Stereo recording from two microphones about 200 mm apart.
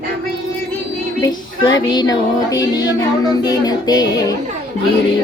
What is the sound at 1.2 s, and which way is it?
Child singing, 20° left (ahead or behind).